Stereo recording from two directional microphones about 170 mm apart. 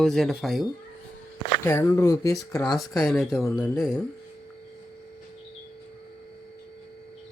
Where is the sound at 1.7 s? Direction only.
15° left (ahead or behind).